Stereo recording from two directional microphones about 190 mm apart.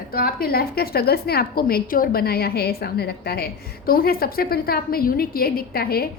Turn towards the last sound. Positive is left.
turn(degrees=55)  # may be behind; listen again after turning